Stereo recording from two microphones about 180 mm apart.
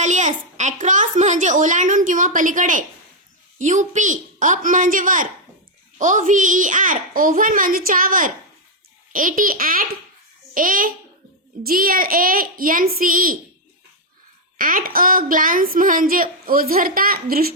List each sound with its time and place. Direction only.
0.0 s a sound: 40° right (ahead or behind)
3.6 s a woman's voice: 45° right (ahead or behind)
14.6 s a woman's voice: 50° right (ahead or behind)